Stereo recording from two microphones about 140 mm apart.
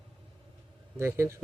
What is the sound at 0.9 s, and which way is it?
Speech, 20° right (ahead or behind).